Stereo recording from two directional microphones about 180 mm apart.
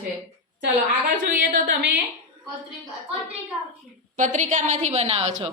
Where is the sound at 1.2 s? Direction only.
60° right (ahead or behind).